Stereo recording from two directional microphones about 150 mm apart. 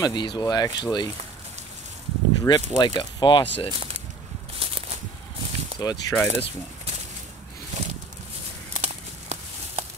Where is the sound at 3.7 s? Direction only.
40° right (ahead or behind).